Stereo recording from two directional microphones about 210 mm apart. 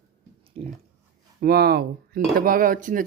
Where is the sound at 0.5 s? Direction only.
30° right (ahead or behind).